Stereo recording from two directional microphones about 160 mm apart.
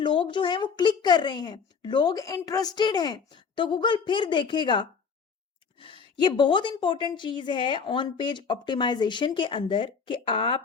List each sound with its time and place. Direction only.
0.0 s a woman's voice: 30° left (ahead or behind)